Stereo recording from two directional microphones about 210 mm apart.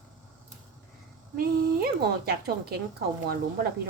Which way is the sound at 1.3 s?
45° right (ahead or behind).